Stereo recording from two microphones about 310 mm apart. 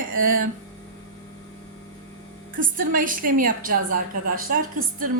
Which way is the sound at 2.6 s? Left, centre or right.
Right.